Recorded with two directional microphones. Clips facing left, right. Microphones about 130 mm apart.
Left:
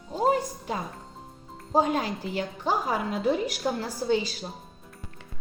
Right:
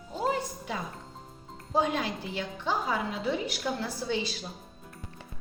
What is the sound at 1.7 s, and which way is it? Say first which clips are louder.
A woman's voice: left 4 dB; 40° left (ahead or behind).